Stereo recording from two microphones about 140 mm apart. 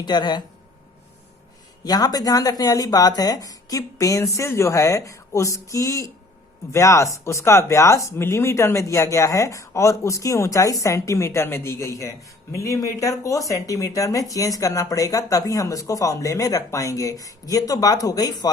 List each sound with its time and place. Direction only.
0.0 s speech: 30° left (ahead or behind)
1.8 s speech: 30° left (ahead or behind)